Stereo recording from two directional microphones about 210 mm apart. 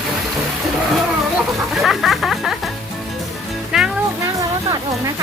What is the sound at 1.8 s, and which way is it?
Music, centre (ahead or behind).